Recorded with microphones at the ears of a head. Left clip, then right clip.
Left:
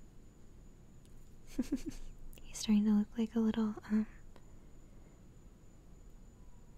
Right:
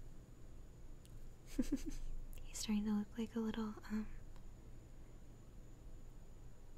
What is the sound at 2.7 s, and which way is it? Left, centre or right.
Speech, left.